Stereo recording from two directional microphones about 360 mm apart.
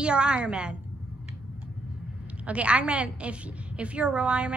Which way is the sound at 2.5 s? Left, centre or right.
Centre.